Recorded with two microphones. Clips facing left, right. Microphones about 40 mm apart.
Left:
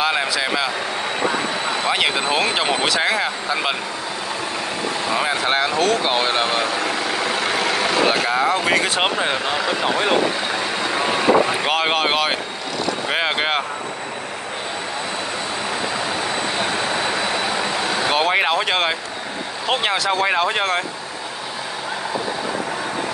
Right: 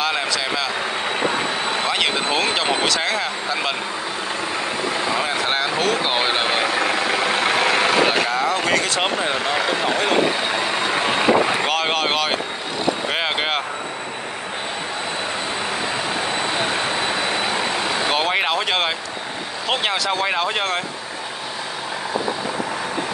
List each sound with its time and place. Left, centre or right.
0.0 s speech: centre
1.9 s speech: centre
5.1 s speech: centre
6.7 s vehicle: right
8.1 s speech: centre
11.6 s speech: centre
18.1 s speech: centre